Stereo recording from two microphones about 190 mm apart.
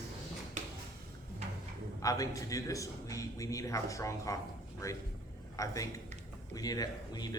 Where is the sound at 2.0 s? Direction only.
15° left (ahead or behind).